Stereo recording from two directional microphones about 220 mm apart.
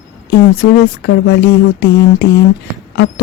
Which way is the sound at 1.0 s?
55° left (ahead or behind).